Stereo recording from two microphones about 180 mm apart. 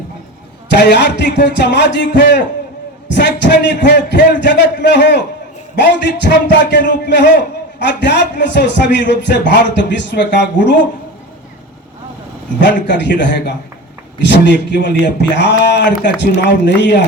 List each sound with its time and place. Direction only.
0.7 s a man's voice: 75° left (ahead or behind)
12.5 s a man's voice: 75° left (ahead or behind)